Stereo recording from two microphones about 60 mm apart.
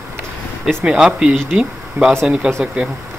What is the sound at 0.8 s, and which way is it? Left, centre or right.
Speech, centre.